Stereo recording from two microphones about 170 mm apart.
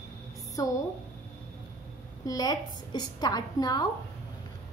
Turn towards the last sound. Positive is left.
turn(degrees=20)  # may be behind; listen again after turning